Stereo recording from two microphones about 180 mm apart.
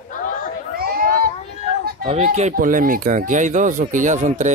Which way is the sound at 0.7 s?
55° right (ahead or behind).